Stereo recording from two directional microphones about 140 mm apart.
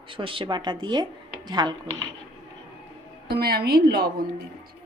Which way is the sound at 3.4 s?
90° right.